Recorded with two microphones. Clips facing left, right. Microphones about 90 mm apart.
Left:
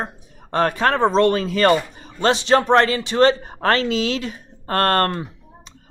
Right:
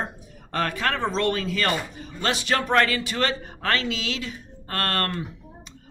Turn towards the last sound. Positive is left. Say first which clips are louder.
# left 8 dB
turn(degrees=40)  # may be behind; listen again after turning